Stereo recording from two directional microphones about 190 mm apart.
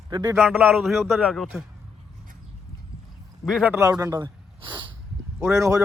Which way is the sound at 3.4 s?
5° right (ahead or behind).